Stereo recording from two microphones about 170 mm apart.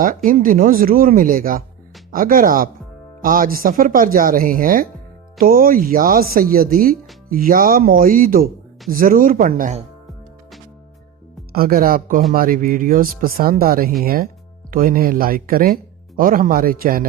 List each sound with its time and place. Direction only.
0.3 s speech: 55° right (ahead or behind)
11.5 s speech: 60° right (ahead or behind)